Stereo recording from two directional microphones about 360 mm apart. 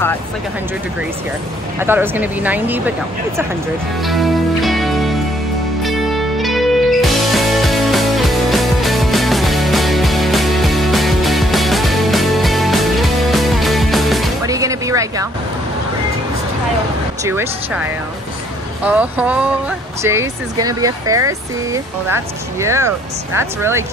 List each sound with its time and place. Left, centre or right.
1.8 s speech: centre
4.0 s music: centre
17.2 s speech: centre
18.9 s speech: centre